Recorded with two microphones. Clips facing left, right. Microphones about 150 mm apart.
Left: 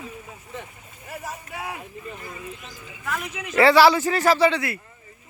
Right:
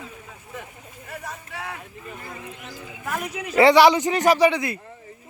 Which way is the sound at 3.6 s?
20° right (ahead or behind).